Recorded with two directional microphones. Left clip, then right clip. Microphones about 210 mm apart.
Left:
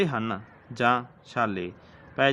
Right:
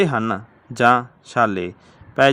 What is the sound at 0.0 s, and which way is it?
A man's voice, 30° right (ahead or behind).